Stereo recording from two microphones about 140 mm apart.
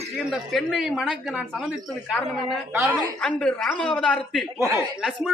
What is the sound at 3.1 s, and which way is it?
Speech, 5° left (ahead or behind).